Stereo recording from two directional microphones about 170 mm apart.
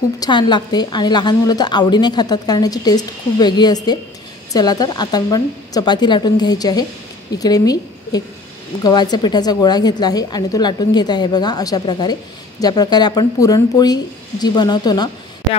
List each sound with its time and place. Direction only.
0.2 s a woman's voice: 25° left (ahead or behind)